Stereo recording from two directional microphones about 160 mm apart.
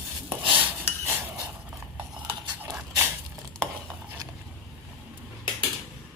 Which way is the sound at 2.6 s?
10° right (ahead or behind).